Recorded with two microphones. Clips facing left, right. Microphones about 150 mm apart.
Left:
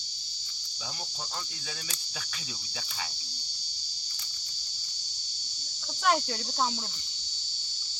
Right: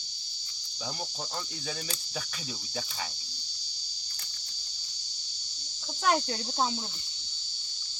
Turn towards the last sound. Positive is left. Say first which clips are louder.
# right 1 dB
turn(degrees=-10)  # may be behind; listen again after turning